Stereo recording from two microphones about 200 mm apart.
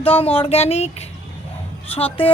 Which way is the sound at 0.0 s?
30° left (ahead or behind).